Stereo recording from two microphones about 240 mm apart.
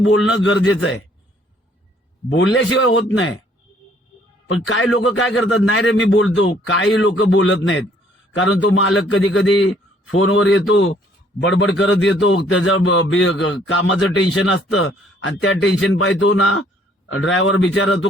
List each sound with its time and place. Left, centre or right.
0.1 s a man's voice: left
2.3 s a man's voice: left
4.7 s a man's voice: left